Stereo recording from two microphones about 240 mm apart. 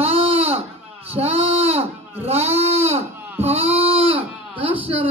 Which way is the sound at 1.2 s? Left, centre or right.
Right.